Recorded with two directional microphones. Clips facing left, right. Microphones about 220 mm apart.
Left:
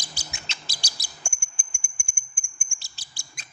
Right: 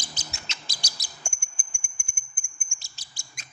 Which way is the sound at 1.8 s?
Centre (ahead or behind).